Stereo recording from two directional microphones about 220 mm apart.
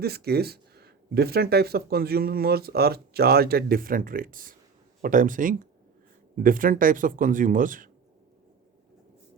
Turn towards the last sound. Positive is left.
turn(degrees=-35)  # may be behind; listen again after turning